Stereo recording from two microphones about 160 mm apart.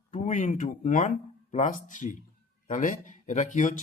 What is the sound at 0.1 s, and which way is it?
Speech, 50° left (ahead or behind).